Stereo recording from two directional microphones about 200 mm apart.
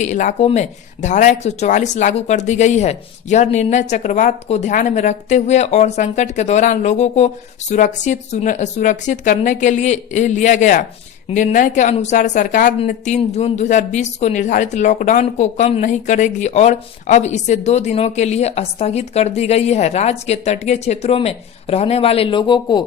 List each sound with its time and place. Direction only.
0.0 s speech: 40° left (ahead or behind); by 22.8 s 20° left (ahead or behind)